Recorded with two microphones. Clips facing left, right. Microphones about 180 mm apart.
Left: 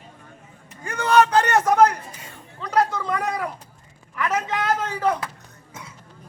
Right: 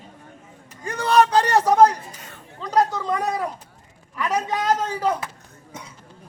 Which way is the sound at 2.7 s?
20° right (ahead or behind).